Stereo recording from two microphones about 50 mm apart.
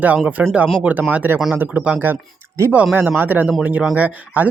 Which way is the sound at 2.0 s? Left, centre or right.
Right.